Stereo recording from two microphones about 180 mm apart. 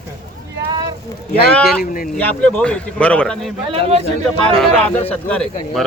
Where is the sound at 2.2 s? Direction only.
10° left (ahead or behind).